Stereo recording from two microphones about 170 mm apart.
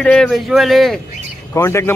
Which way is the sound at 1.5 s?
15° left (ahead or behind).